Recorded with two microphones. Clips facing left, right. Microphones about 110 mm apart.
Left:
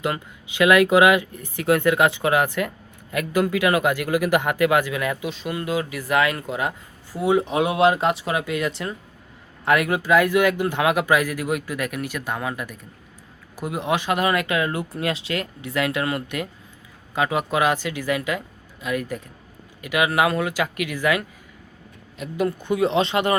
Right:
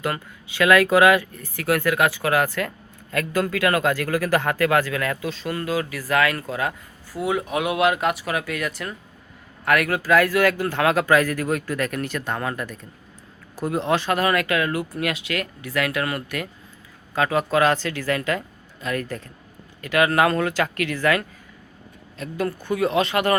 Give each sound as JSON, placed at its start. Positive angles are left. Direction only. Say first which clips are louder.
{"t": 0.0, "sound": "speech", "louder": "left 1 dB", "side_deg": 20}